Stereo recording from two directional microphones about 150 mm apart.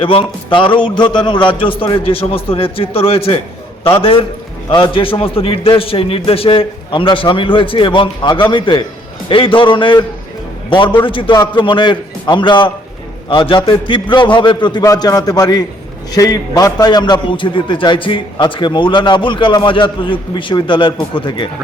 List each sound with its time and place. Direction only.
0.0 s a man's voice: 35° left (ahead or behind)
4.7 s a man's voice: 35° left (ahead or behind)